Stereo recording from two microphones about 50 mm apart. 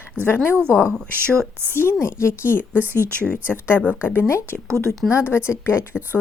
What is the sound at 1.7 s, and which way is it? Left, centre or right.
Speech, left.